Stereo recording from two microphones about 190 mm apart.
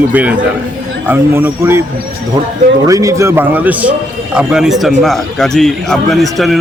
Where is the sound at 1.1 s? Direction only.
10° right (ahead or behind).